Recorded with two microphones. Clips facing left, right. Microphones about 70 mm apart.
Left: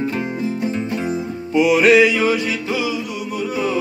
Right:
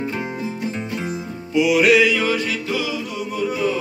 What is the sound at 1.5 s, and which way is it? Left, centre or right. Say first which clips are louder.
Music: left 2 dB; left.